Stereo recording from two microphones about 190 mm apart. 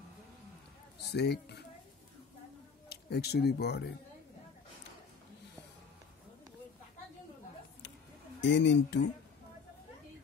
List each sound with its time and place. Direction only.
1.1 s speech: 60° left (ahead or behind)
2.9 s speech: 60° left (ahead or behind)
8.4 s speech: 65° left (ahead or behind)